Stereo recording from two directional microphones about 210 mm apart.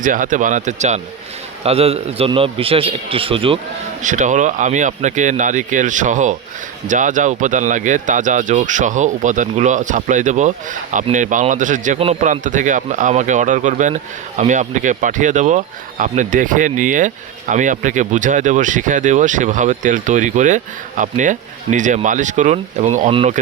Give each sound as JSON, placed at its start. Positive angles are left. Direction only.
{"t": 0.0, "sound": "a man's voice", "side_deg": -40}
{"t": 4.0, "sound": "a man's voice", "side_deg": -35}